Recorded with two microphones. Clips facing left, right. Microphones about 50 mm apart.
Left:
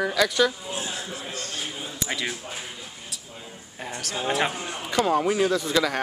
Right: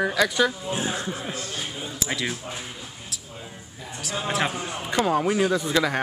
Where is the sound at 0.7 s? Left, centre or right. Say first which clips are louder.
Right 4 dB; right.